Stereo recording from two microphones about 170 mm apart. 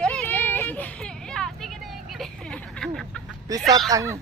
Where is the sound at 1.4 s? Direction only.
5° left (ahead or behind).